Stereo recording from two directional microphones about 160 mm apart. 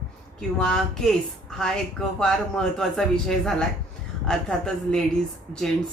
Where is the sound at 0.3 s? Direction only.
5° left (ahead or behind).